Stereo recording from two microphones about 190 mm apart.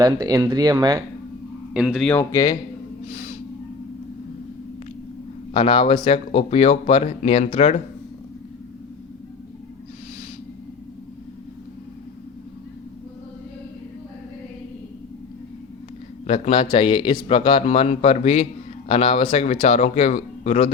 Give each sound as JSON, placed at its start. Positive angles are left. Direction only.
{"t": 0.0, "sound": "speech", "side_deg": -20}
{"t": 1.7, "sound": "a man's voice", "side_deg": -5}
{"t": 2.3, "sound": "speech", "side_deg": 20}
{"t": 3.1, "sound": "snort", "side_deg": 40}
{"t": 5.5, "sound": "speech", "side_deg": 25}
{"t": 16.2, "sound": "speech", "side_deg": 30}